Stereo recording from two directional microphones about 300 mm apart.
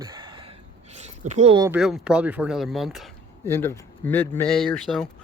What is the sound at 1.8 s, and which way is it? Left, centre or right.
Speech, centre.